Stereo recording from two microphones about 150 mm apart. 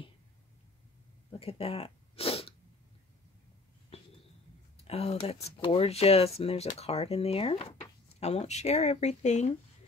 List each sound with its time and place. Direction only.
1.3 s sneeze: 40° left (ahead or behind)
4.8 s speech: 40° left (ahead or behind)